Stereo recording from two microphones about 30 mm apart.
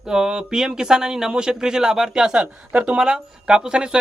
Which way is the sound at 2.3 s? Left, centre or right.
Right.